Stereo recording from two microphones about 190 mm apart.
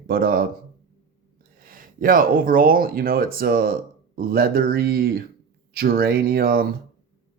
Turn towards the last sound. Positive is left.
turn(degrees=-50)  # may be behind; listen again after turning